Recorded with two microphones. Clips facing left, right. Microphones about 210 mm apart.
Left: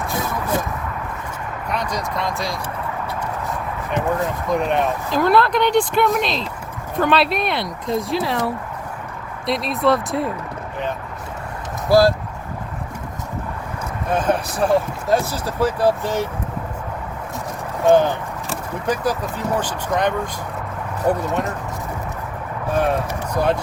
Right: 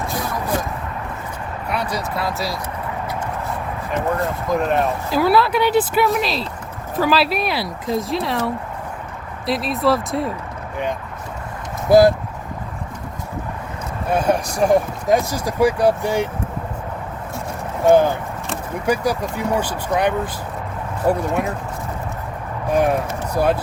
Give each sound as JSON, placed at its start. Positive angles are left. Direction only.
{"t": 1.7, "sound": "a sound", "side_deg": -10}
{"t": 2.1, "sound": "speech", "side_deg": -5}
{"t": 4.1, "sound": "speech", "side_deg": 0}
{"t": 9.5, "sound": "speech", "side_deg": 0}
{"t": 11.9, "sound": "speech", "side_deg": -20}
{"t": 14.1, "sound": "speech", "side_deg": -10}
{"t": 17.8, "sound": "speech", "side_deg": -10}
{"t": 22.7, "sound": "speech", "side_deg": -15}